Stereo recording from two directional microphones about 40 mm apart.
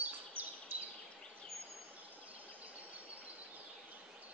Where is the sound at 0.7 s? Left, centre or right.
Right.